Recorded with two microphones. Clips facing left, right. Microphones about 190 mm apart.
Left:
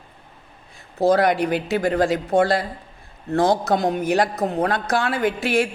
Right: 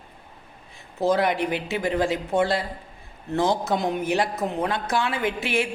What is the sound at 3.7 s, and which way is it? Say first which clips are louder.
Speech: left 4 dB; 40° left (ahead or behind).